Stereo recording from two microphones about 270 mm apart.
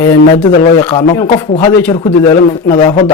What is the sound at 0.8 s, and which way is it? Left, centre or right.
Speech, centre.